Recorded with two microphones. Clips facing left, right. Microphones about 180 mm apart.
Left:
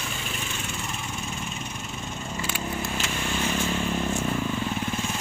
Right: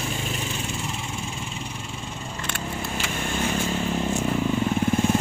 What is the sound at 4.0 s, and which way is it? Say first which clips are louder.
Vehicle: right 3 dB; 15° right (ahead or behind).